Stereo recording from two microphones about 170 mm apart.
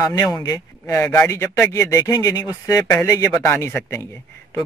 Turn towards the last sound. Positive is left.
turn(degrees=15)  # may be behind; listen again after turning